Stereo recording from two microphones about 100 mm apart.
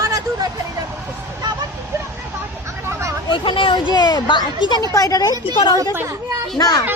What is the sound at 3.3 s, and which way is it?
Speech, 55° left (ahead or behind).